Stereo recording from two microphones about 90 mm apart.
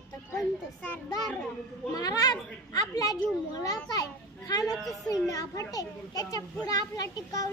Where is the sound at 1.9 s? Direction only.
45° left (ahead or behind).